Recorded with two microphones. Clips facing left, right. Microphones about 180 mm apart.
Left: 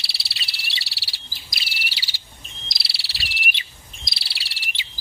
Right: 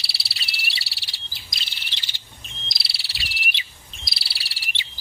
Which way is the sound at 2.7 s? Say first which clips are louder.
Even; centre (ahead or behind).